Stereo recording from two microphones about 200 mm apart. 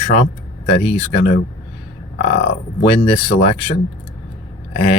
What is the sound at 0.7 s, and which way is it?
Speech, 30° left (ahead or behind).